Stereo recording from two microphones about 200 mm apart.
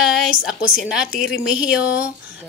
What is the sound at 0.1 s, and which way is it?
A woman's voice, 5° right (ahead or behind).